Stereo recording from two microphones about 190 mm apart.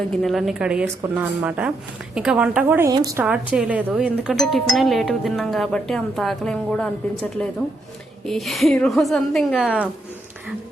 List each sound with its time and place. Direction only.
0.2 s a woman's voice: centre (ahead or behind); by 3.2 s 20° right (ahead or behind)
3.2 s speech: 5° right (ahead or behind)